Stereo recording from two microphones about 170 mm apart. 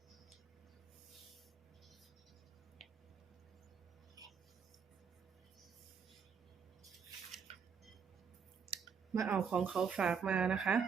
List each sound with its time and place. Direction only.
4.2 s a sound: 20° right (ahead or behind)
7.5 s squish: 35° right (ahead or behind)
9.2 s speech: centre (ahead or behind)